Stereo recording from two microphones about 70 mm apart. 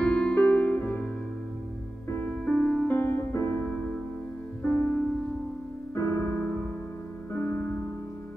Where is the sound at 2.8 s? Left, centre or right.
Left.